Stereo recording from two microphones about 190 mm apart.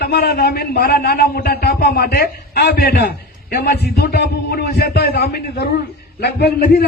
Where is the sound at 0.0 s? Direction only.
55° left (ahead or behind).